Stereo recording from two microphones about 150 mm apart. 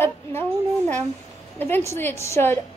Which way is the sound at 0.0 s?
15° left (ahead or behind).